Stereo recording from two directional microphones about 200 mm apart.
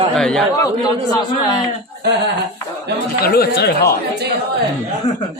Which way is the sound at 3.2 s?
50° left (ahead or behind).